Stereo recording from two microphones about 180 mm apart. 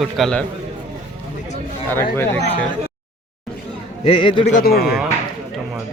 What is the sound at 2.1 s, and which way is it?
Speech, 10° left (ahead or behind).